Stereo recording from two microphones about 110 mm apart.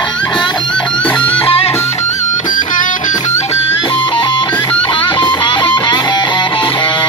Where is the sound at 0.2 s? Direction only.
10° left (ahead or behind).